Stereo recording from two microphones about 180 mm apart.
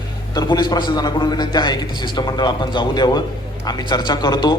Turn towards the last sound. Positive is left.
turn(degrees=25)  # may be behind; listen again after turning